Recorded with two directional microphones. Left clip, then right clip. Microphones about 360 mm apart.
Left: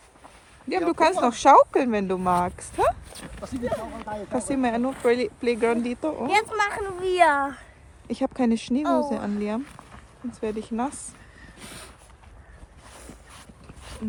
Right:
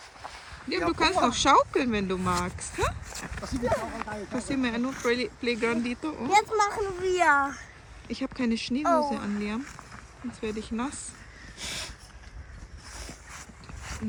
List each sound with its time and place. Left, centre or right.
0.7 s speech: centre
6.2 s speech: left
8.1 s speech: centre
11.6 s a sound: right